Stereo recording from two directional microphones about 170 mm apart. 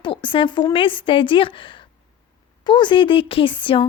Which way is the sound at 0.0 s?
30° left (ahead or behind).